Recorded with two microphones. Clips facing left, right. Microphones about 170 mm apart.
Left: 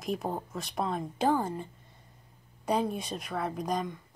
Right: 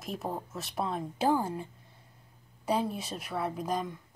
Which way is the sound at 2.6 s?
5° right (ahead or behind).